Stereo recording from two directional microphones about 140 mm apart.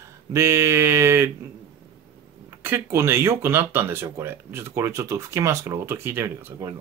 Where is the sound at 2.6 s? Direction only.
20° right (ahead or behind).